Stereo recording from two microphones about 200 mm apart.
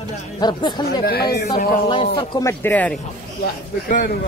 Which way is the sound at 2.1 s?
20° left (ahead or behind).